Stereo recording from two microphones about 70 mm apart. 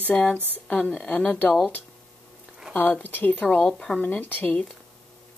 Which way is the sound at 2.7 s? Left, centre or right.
Left.